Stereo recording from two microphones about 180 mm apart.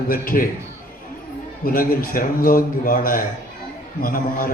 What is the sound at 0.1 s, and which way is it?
Speech, 50° left (ahead or behind).